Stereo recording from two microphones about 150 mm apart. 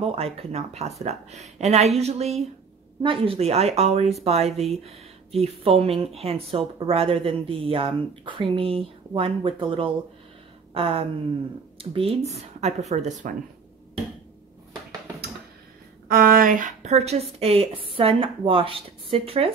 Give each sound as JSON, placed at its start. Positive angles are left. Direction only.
{"t": 0.0, "sound": "speech", "side_deg": -40}
{"t": 10.7, "sound": "a sound", "side_deg": -40}
{"t": 11.8, "sound": "speech", "side_deg": -40}
{"t": 16.1, "sound": "speech", "side_deg": -75}